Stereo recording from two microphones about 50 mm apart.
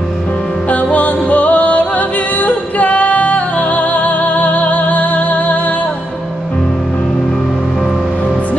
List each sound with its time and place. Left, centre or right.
0.9 s music: left